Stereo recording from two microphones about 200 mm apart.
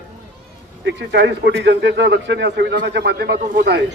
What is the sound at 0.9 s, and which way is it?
A man's voice, 60° right (ahead or behind).